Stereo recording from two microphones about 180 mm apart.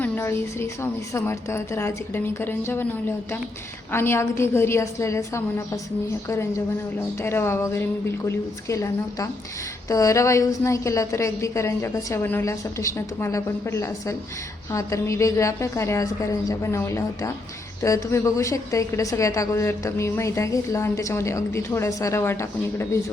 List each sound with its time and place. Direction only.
0.0 s a woman's voice: 15° left (ahead or behind)
3.9 s a woman's voice: 15° left (ahead or behind)